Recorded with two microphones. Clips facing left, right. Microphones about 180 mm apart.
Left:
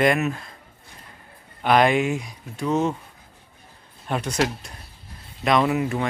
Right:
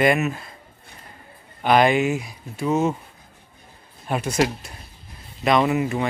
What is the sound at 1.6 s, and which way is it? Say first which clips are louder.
Speech: right 1 dB; centre (ahead or behind).